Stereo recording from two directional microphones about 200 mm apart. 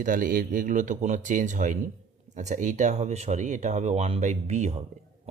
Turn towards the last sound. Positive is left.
turn(degrees=-35)  # may be behind; listen again after turning